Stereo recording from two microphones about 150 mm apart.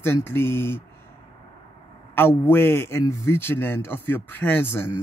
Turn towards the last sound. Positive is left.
turn(degrees=15)  # may be behind; listen again after turning